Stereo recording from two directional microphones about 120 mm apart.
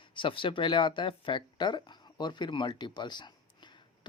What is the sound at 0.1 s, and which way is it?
Speech, 45° left (ahead or behind).